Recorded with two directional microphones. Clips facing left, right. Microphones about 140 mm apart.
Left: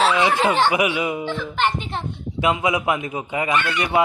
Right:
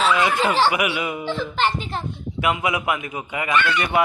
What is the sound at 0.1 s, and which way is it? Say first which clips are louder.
A child's voice: left 1 dB; 25° left (ahead or behind).